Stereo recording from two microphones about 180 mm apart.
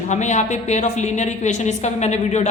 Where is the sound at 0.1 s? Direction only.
40° left (ahead or behind).